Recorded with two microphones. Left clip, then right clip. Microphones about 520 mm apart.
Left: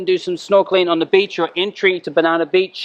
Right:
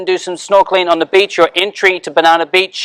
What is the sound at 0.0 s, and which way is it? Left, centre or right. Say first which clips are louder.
Speech: right 2 dB; right.